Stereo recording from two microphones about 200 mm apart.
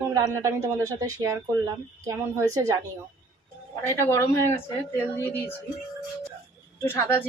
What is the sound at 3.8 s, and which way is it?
Speech, 15° left (ahead or behind).